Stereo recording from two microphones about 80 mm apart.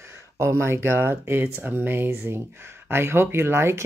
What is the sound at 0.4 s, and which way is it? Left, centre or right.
Speech, right.